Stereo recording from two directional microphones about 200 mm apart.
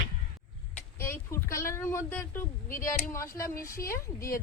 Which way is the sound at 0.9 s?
10° left (ahead or behind).